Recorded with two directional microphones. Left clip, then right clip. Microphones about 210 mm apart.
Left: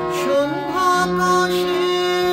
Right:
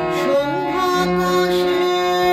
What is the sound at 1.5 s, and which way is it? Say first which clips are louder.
Music: right 2 dB; 25° right (ahead or behind).